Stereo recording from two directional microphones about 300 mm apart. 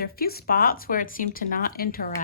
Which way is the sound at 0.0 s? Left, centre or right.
Left.